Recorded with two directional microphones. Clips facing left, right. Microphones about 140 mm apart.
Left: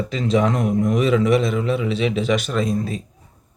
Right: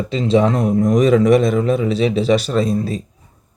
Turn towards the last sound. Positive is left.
turn(degrees=-35)  # may be behind; listen again after turning